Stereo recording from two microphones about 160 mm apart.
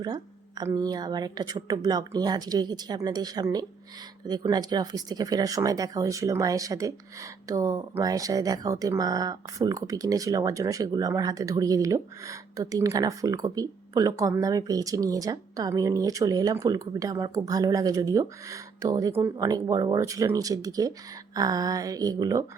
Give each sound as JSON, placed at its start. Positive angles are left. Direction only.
{"t": 0.0, "sound": "speech", "side_deg": -25}